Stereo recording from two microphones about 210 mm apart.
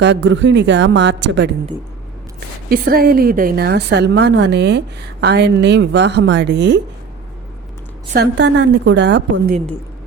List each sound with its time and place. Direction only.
0.0 s a woman's voice: 60° right (ahead or behind)
2.6 s a woman's voice: 45° right (ahead or behind)
8.1 s a woman's voice: 55° right (ahead or behind)